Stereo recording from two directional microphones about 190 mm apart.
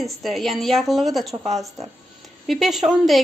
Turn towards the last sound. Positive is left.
turn(degrees=0)  # may be behind; listen again after turning